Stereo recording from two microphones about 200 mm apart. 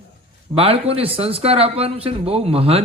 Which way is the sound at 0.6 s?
30° right (ahead or behind).